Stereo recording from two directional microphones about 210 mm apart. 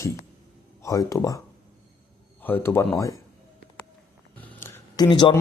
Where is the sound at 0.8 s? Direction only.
15° left (ahead or behind).